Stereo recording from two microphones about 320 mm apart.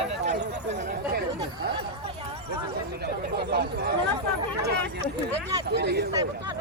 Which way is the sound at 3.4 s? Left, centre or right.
Right.